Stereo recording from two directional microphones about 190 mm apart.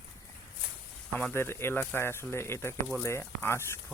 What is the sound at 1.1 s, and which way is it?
Speech, 10° left (ahead or behind).